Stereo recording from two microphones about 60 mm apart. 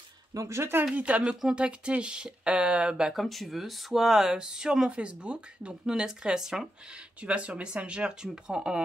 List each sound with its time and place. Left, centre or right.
0.3 s speech: right
0.9 s speech: right
1.3 s speech: centre
1.6 s speech: centre
3.1 s speech: centre
7.2 s speech: right